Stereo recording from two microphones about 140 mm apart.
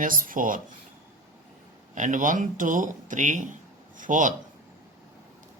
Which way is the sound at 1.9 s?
65° right (ahead or behind).